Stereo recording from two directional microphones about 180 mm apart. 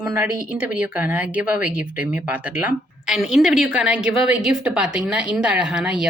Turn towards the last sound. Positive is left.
turn(degrees=-5)  # may be behind; listen again after turning